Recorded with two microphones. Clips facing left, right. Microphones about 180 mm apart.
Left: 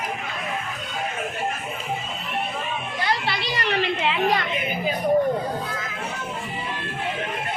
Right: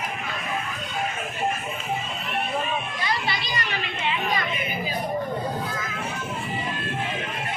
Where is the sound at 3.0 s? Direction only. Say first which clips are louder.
Left 6 dB; 70° left (ahead or behind).